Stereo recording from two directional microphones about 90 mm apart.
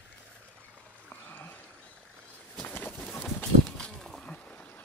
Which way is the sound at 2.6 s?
20° left (ahead or behind).